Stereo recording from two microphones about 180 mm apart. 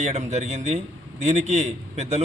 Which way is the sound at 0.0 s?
35° right (ahead or behind).